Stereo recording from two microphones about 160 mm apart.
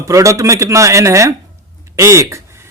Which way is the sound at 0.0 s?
20° right (ahead or behind).